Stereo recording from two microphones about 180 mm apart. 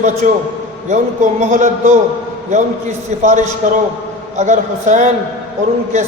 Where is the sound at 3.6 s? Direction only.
45° right (ahead or behind).